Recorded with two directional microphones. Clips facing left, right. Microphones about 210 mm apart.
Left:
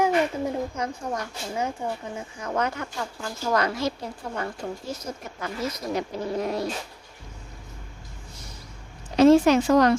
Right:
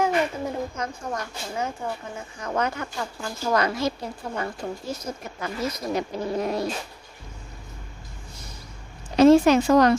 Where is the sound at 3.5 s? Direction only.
10° right (ahead or behind).